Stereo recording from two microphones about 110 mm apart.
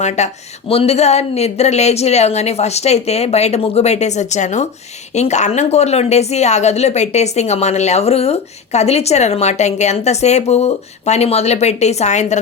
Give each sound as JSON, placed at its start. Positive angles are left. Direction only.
{"t": 0.0, "sound": "speech", "side_deg": 90}
{"t": 0.7, "sound": "a woman's voice", "side_deg": 65}